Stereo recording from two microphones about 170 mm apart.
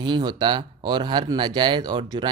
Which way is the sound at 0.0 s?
25° right (ahead or behind).